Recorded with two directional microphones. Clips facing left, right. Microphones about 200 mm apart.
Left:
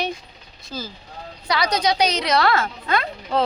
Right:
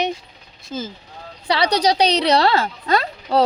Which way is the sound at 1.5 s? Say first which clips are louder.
Right 3 dB; 30° right (ahead or behind).